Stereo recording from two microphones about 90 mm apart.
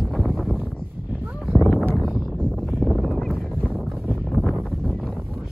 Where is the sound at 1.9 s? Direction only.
Centre (ahead or behind).